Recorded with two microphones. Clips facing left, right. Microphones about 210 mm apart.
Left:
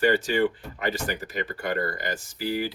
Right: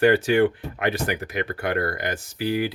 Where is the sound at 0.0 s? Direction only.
60° right (ahead or behind).